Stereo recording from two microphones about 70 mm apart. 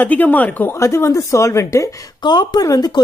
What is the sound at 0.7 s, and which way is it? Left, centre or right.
Speech, left.